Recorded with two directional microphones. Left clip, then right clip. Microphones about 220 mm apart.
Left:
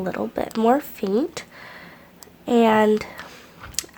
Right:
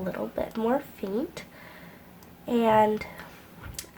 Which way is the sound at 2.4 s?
45° left (ahead or behind).